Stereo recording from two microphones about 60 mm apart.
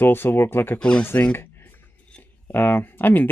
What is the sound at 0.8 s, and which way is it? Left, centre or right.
Speech, centre.